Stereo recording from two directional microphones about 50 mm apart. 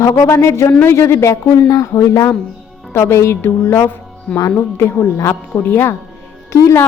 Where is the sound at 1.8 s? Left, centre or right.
Left.